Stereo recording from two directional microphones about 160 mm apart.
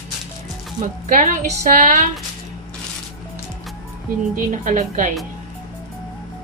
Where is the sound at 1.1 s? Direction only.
50° right (ahead or behind).